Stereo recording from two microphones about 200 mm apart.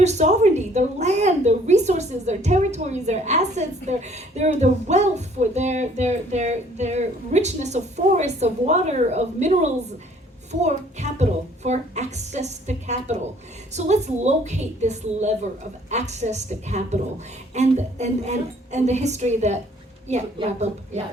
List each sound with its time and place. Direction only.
0.0 s a woman's voice: 35° right (ahead or behind)